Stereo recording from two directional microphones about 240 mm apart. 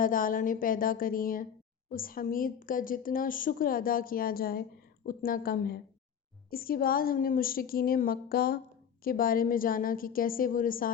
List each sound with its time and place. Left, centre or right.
0.0 s a woman's voice: left